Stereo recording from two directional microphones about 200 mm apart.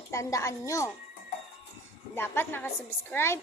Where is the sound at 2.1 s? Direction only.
10° left (ahead or behind).